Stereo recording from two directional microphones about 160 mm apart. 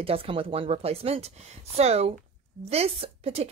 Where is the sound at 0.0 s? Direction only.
35° right (ahead or behind).